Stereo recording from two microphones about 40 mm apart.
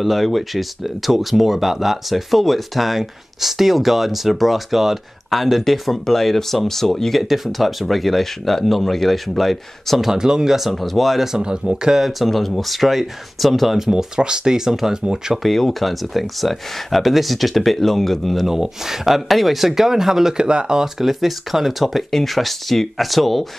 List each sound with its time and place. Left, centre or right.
0.0 s speech: centre
10.1 s speech: centre
10.7 s speech: centre
11.3 s speech: centre
12.1 s speech: centre
13.7 s speech: centre
15.3 s speech: centre
20.3 s speech: right
21.0 s speech: centre